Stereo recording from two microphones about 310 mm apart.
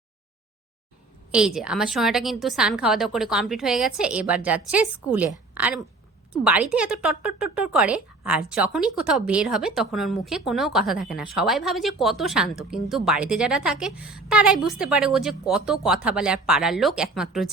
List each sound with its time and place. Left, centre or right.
1.3 s a woman's voice: centre